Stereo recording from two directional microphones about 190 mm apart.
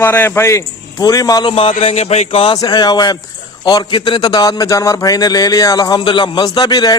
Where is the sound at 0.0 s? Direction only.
10° left (ahead or behind).